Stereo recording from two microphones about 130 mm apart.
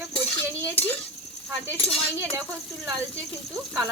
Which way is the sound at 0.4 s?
20° right (ahead or behind).